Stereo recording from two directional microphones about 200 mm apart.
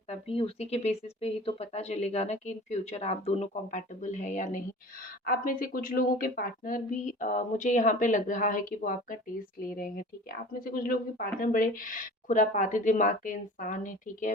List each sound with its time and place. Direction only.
0.1 s a woman's voice: 30° left (ahead or behind)